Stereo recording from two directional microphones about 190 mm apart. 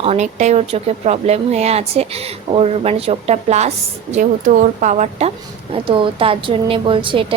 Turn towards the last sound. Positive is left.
turn(degrees=-25)  # may be behind; listen again after turning